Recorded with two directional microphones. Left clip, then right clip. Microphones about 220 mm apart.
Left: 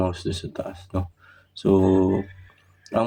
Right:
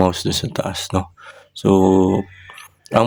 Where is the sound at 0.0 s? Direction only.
45° right (ahead or behind).